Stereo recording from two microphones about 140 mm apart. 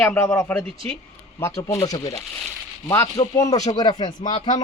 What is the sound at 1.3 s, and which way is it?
Speech, 20° left (ahead or behind).